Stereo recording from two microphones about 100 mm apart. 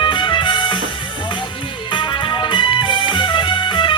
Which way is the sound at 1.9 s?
55° left (ahead or behind).